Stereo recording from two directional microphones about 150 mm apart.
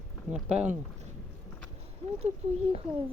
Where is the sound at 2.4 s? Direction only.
50° right (ahead or behind).